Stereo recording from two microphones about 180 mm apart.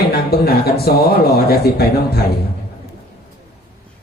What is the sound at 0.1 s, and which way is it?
Speech, 60° left (ahead or behind).